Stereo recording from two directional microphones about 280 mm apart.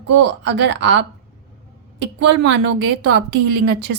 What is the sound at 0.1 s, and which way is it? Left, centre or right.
A woman's voice, right.